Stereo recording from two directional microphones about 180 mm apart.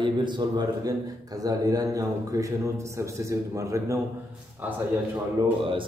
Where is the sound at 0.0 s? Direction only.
25° right (ahead or behind).